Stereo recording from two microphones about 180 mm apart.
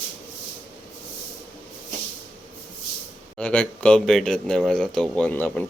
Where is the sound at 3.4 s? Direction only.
5° left (ahead or behind).